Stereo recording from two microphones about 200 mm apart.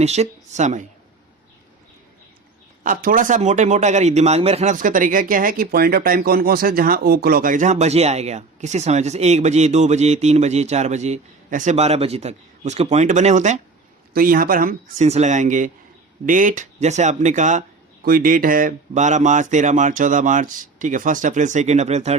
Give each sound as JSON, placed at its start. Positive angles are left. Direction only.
{"t": 0.0, "sound": "speech", "side_deg": -35}
{"t": 2.8, "sound": "speech", "side_deg": -45}